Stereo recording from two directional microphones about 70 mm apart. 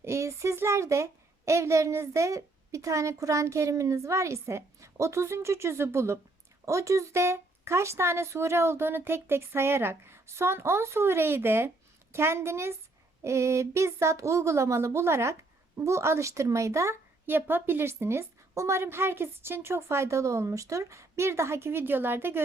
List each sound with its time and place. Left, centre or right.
0.0 s a woman's voice: right